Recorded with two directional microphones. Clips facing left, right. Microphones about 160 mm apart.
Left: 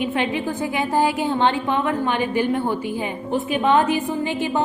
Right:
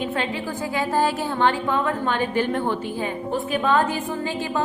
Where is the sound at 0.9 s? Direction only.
20° left (ahead or behind).